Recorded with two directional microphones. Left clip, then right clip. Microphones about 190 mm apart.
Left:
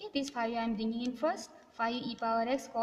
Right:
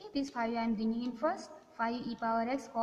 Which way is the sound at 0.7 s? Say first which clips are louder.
Even; 90° left.